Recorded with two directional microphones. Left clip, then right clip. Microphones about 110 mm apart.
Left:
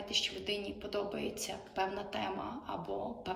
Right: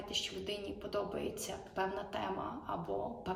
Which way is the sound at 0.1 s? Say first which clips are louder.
Left 4 dB; 20° right (ahead or behind).